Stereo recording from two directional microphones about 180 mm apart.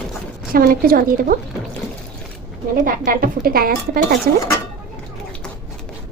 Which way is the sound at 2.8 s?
55° right (ahead or behind).